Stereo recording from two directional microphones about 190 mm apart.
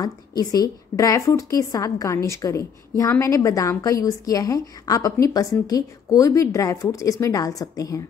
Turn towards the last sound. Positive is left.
turn(degrees=20)  # may be behind; listen again after turning